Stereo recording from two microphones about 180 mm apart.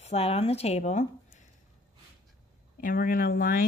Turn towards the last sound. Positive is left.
turn(degrees=50)  # may be behind; listen again after turning